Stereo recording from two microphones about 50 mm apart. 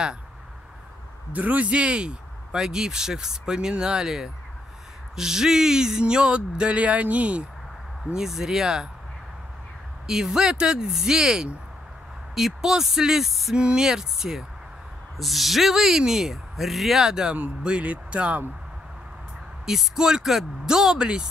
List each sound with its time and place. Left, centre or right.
1.3 s speech: right; by 4.3 s centre
5.1 s a sound: centre; by 7.4 s right
8.1 s speech: centre
10.0 s speech: centre
13.6 s speech: centre
17.6 s a sound: right
19.6 s speech: centre